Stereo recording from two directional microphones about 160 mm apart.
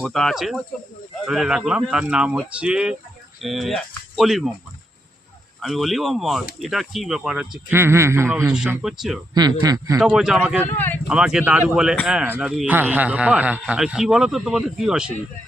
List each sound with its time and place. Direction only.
0.0 s speech: centre (ahead or behind)
5.5 s speech: centre (ahead or behind)
7.7 s a man's voice: 15° right (ahead or behind)
9.3 s speech: 25° right (ahead or behind)
10.0 s speech: 5° right (ahead or behind)
10.7 s speech: 10° left (ahead or behind)
11.1 s speech: 5° right (ahead or behind)